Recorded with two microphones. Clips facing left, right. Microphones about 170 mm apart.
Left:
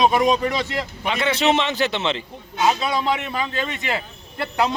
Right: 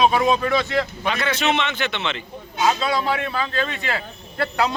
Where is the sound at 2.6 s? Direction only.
15° left (ahead or behind).